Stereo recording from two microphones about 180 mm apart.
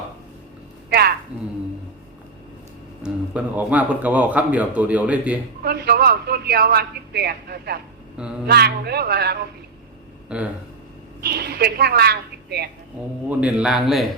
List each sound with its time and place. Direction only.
0.9 s a sound: 60° right (ahead or behind)
1.3 s a sound: 5° right (ahead or behind)
3.0 s a man's voice: 10° right (ahead or behind)
5.6 s a man's voice: 60° right (ahead or behind)
11.2 s a man's voice: 60° right (ahead or behind)
13.4 s a man's voice: 5° right (ahead or behind)